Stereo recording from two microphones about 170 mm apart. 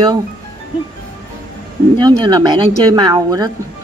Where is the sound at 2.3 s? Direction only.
25° right (ahead or behind).